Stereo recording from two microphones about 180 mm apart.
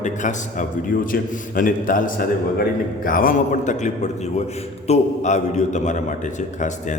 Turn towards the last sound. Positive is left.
turn(degrees=40)  # may be behind; listen again after turning